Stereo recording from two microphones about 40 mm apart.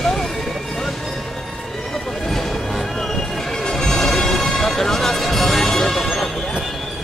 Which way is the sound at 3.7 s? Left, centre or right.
Centre.